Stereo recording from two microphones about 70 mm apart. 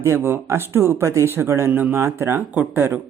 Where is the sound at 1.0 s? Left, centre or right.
Right.